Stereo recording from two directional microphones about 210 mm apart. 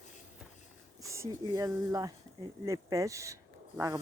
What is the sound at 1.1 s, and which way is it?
Speech, 15° right (ahead or behind).